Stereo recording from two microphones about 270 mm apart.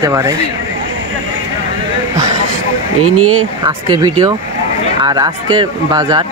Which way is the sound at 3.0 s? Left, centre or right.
Right.